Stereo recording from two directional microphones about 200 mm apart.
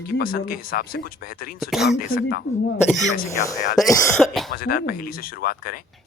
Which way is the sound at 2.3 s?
55° left (ahead or behind).